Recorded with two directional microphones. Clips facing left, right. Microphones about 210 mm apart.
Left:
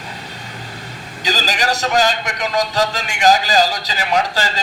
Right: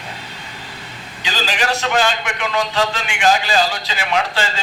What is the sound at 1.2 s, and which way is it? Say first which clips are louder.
A man's voice: left 1 dB; 40° left (ahead or behind).